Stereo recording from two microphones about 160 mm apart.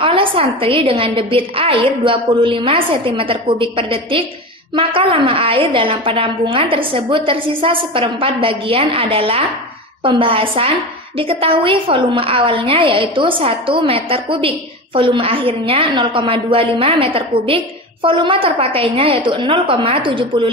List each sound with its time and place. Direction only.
0.0 s a woman's voice: 35° right (ahead or behind)